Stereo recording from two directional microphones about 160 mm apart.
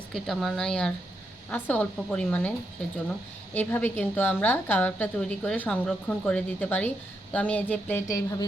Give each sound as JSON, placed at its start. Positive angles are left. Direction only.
{"t": 0.1, "sound": "a woman's voice", "side_deg": 0}
{"t": 3.5, "sound": "a woman's voice", "side_deg": 10}
{"t": 8.1, "sound": "speech", "side_deg": 25}